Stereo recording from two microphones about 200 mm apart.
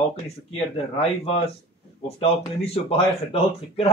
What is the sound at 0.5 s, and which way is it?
A man's voice, 30° left (ahead or behind).